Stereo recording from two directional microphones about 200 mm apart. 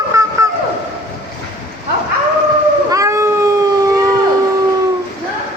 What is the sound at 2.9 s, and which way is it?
Cat, 15° right (ahead or behind).